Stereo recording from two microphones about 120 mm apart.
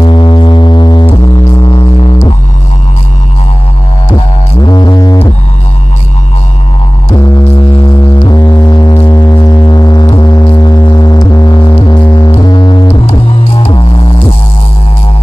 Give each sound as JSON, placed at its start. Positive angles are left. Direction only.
{"t": 0.0, "sound": "a sound", "side_deg": 40}
{"t": 1.7, "sound": "music", "side_deg": 45}
{"t": 4.1, "sound": "music", "side_deg": 35}
{"t": 8.2, "sound": "music", "side_deg": 35}